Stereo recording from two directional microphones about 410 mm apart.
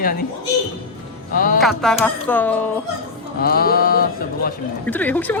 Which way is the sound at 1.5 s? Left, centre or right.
Centre.